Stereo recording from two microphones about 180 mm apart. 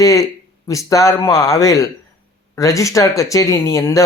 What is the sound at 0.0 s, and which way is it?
Speech, 20° left (ahead or behind).